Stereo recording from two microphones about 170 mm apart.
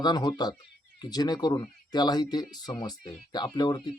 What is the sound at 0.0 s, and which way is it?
Speech, 25° left (ahead or behind).